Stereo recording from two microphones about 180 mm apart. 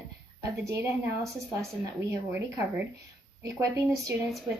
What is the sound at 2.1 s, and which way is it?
Speech, 15° right (ahead or behind).